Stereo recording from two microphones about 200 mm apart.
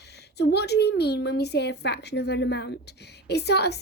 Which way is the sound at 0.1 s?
55° left (ahead or behind).